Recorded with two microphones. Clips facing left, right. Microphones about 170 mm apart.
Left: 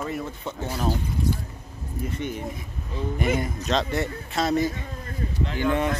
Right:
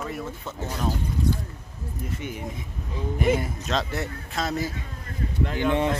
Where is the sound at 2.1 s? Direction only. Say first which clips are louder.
Left 2 dB; 10° right (ahead or behind).